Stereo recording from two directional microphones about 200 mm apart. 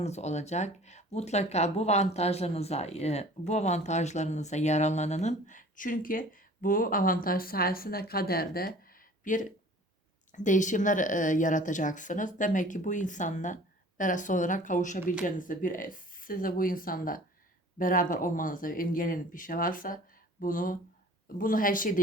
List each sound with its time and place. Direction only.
0.0 s speech: 35° left (ahead or behind)